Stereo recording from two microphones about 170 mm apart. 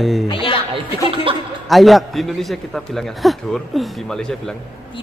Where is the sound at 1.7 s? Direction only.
Centre (ahead or behind).